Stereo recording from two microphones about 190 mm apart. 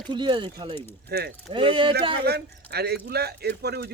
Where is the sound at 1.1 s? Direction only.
60° right (ahead or behind).